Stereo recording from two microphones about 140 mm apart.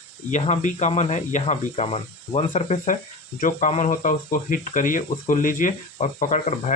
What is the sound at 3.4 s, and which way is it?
Speech, 65° left (ahead or behind).